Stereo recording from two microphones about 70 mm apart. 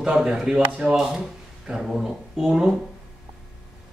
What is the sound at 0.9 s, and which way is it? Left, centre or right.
Speech, centre.